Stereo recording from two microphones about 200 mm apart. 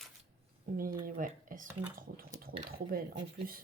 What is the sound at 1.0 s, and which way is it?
Speech, 45° right (ahead or behind).